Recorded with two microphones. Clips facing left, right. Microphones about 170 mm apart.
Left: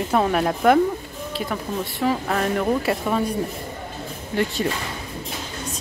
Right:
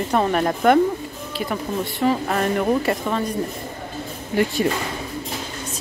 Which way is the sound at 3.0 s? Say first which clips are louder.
Left 1 dB; 10° left (ahead or behind).